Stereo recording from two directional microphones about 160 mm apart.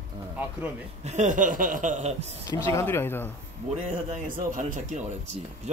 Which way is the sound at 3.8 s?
55° right (ahead or behind).